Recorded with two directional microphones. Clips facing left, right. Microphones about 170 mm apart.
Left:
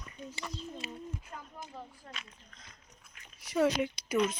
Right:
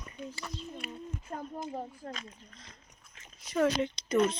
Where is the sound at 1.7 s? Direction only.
40° right (ahead or behind).